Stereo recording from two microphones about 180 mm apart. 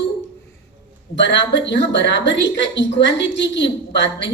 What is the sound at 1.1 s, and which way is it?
A woman's voice, 80° left.